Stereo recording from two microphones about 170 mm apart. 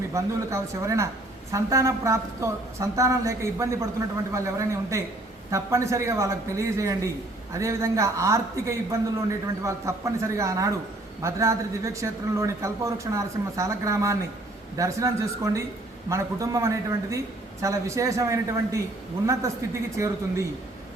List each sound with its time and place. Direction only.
0.1 s a woman's voice: 15° right (ahead or behind)